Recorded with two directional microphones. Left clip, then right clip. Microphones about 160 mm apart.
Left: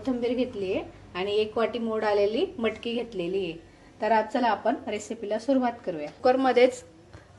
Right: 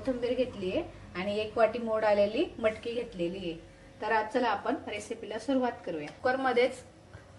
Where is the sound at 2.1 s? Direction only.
45° left (ahead or behind).